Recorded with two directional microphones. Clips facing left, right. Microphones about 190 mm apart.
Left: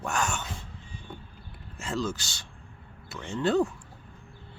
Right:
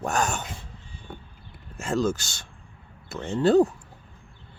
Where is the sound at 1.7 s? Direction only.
45° right (ahead or behind).